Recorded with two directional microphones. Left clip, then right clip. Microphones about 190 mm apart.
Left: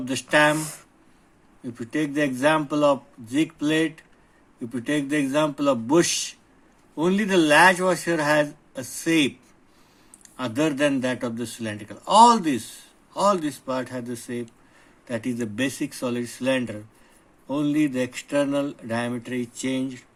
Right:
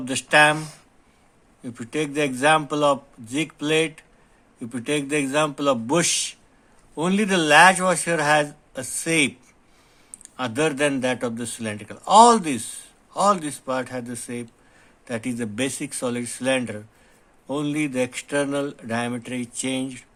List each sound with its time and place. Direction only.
0.0 s speech: 35° right (ahead or behind)
1.6 s speech: 35° right (ahead or behind)